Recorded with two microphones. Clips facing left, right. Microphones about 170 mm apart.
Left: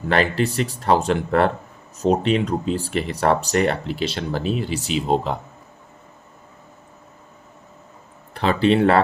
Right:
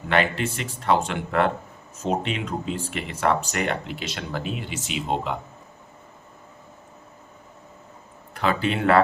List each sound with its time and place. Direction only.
0.1 s speech: 35° left (ahead or behind)
8.3 s speech: 30° left (ahead or behind)